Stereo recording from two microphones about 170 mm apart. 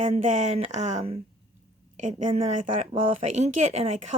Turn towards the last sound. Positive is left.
turn(degrees=-45)  # may be behind; listen again after turning